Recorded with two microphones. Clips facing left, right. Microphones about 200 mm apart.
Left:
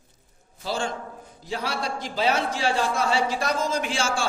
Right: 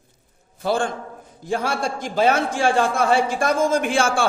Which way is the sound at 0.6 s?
55° right (ahead or behind).